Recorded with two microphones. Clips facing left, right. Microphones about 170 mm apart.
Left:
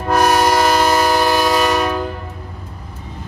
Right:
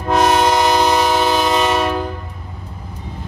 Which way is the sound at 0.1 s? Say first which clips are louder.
Even; 20° right (ahead or behind).